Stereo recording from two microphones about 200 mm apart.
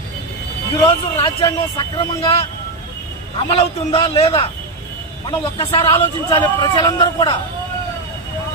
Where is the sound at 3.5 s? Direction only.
30° left (ahead or behind).